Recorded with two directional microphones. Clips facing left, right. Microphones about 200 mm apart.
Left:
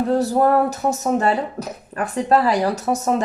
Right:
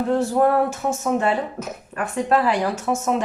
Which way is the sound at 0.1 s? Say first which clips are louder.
Left 1 dB; 35° left (ahead or behind).